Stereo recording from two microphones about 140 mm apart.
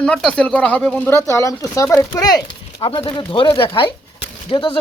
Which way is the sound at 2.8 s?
40° left (ahead or behind).